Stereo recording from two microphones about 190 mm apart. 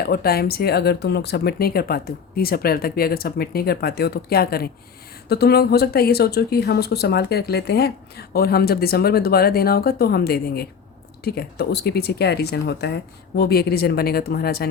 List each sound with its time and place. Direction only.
0.0 s speech: 55° left (ahead or behind)